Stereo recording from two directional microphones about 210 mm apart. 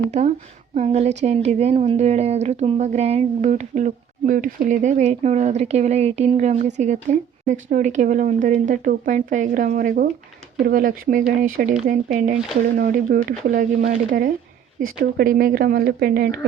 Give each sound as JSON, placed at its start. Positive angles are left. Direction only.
{"t": 0.1, "sound": "speech", "side_deg": -35}